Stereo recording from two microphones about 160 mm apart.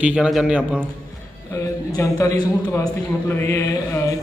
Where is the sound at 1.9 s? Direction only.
20° left (ahead or behind).